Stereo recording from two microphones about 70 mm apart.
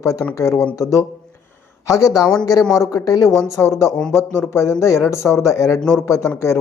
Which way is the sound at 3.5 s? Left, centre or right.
Left.